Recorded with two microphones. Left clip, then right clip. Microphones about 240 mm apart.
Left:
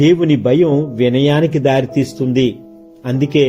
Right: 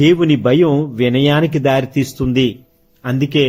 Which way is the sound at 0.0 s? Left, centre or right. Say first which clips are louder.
Even; centre.